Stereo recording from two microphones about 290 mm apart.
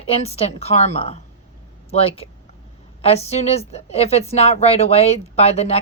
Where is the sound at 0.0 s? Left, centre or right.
Left.